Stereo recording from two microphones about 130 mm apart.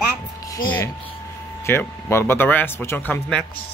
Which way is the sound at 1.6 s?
20° left (ahead or behind).